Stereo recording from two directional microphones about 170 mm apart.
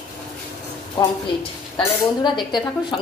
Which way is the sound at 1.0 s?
30° left (ahead or behind).